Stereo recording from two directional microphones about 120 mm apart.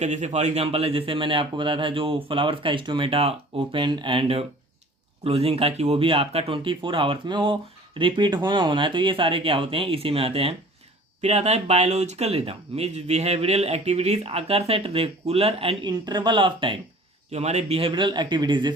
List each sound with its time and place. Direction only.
0.0 s speech: 75° right (ahead or behind); by 10.5 s 50° right (ahead or behind)
11.2 s speech: 65° right (ahead or behind)
15.9 s speech: 35° right (ahead or behind)
17.3 s speech: 65° right (ahead or behind); by 18.7 s 40° right (ahead or behind)